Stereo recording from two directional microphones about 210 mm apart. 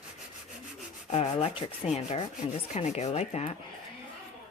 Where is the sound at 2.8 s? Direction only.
30° left (ahead or behind).